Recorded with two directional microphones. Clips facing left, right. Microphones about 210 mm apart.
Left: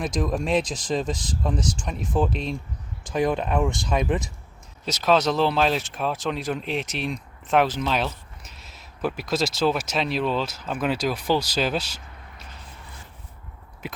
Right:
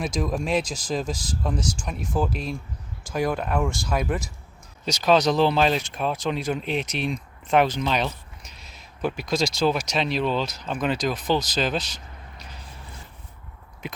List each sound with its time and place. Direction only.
0.0 s speech: centre (ahead or behind)
3.0 s speech: 20° left (ahead or behind)
4.9 s speech: 5° left (ahead or behind)
13.8 s speech: 5° left (ahead or behind)